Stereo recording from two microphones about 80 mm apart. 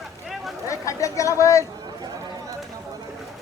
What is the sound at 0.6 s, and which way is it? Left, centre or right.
Chatter, left.